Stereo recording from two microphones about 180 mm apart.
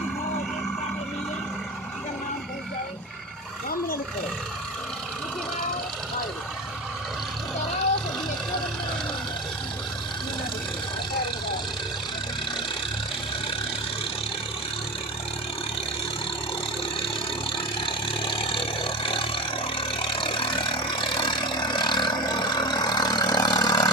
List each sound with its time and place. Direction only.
17.7 s vehicle: 30° left (ahead or behind)